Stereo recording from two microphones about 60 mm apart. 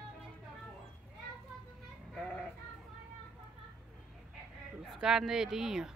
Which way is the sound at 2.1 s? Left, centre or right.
Centre.